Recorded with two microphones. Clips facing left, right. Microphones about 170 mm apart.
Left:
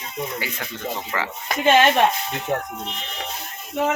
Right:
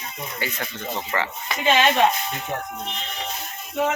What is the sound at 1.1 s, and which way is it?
Speech, centre (ahead or behind).